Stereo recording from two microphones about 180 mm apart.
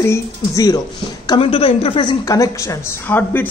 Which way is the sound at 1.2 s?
30° left (ahead or behind).